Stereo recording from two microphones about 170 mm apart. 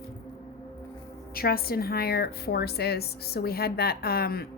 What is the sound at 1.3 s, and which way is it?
A woman's voice, 60° left (ahead or behind).